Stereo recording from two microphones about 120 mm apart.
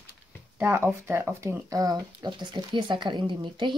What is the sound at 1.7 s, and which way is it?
Speech, 30° right (ahead or behind).